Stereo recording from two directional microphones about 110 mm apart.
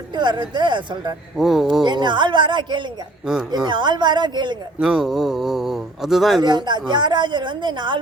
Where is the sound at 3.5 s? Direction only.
40° right (ahead or behind).